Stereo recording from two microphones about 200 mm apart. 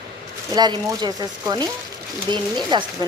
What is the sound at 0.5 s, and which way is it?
Speech, 20° right (ahead or behind).